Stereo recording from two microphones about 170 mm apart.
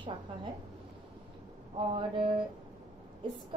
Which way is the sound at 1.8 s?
30° right (ahead or behind).